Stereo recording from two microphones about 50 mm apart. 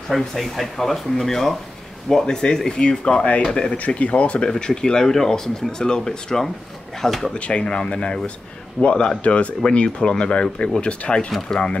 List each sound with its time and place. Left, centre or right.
0.1 s speech: centre
3.7 s speech: left; by 7.3 s centre
7.3 s speech: left